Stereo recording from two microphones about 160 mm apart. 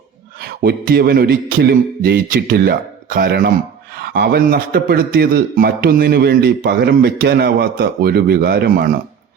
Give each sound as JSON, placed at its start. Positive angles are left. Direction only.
{"t": 0.3, "sound": "a man's voice", "side_deg": -70}